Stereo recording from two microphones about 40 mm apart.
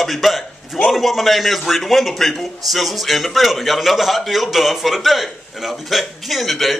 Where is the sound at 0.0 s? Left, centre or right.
Centre.